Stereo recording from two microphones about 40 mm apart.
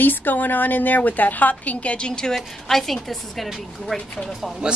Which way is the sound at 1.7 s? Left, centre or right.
Left.